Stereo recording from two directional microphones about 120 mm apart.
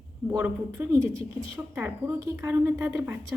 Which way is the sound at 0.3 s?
20° right (ahead or behind).